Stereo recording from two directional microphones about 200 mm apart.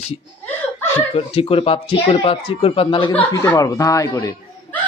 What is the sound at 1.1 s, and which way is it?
Speech, 30° left (ahead or behind).